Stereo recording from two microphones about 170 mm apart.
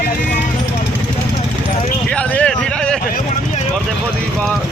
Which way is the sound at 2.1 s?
5° left (ahead or behind).